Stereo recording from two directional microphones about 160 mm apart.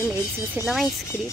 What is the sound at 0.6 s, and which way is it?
Speech, centre (ahead or behind).